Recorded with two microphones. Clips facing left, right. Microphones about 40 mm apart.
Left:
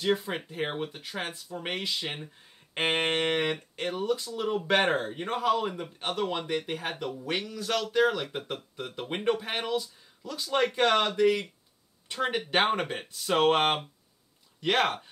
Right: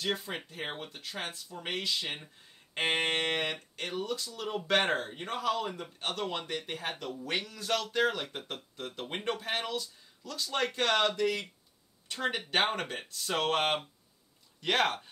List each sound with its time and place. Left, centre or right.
0.0 s speech: centre
14.6 s speech: centre